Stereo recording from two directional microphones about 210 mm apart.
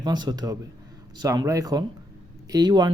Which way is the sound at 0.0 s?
20° right (ahead or behind).